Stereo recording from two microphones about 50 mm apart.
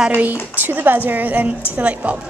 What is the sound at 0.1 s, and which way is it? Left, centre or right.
A woman's voice, right.